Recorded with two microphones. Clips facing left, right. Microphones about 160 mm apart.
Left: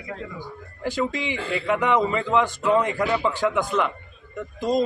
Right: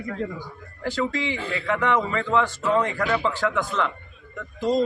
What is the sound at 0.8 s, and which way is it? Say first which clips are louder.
A man's voice: even; 15° left (ahead or behind).